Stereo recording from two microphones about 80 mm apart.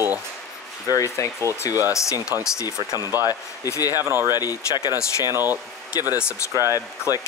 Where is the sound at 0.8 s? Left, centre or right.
Left.